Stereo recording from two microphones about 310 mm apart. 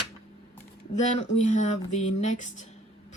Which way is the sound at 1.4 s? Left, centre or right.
Left.